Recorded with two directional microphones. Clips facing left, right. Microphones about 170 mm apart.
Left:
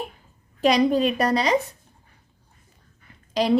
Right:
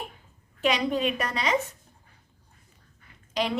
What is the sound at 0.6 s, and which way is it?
Speech, 35° left (ahead or behind).